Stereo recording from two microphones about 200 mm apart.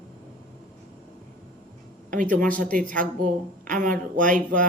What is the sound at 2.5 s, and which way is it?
Speech, 45° right (ahead or behind).